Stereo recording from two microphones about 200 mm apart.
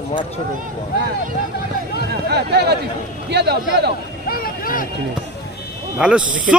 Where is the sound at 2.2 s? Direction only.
55° right (ahead or behind).